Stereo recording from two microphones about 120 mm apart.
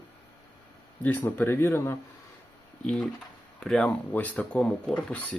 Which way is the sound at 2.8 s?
10° left (ahead or behind).